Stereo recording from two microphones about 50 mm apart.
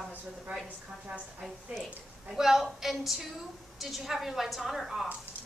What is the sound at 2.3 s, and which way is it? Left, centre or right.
A woman's voice, centre.